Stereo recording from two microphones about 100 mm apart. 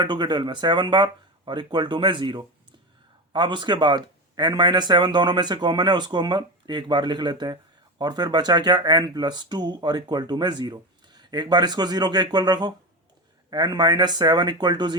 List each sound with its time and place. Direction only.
0.0 s speech: 45° right (ahead or behind)